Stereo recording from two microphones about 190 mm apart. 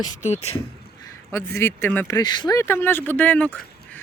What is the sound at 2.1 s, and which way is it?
Speech, 25° left (ahead or behind).